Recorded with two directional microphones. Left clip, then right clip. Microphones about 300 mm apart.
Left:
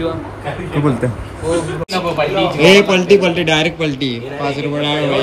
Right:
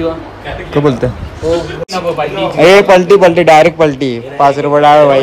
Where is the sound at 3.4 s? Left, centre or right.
Right.